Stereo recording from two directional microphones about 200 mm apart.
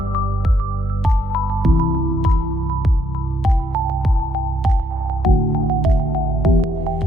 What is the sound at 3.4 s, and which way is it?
Music, centre (ahead or behind).